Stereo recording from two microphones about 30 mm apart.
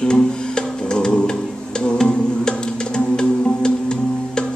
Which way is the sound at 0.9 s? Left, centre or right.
Left.